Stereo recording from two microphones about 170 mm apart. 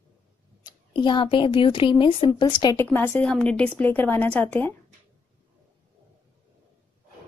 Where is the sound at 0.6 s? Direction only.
25° left (ahead or behind).